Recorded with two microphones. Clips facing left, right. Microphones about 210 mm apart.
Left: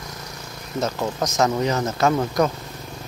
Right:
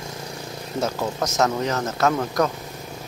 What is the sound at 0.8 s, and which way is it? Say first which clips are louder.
Speech: left 1 dB; 5° right (ahead or behind).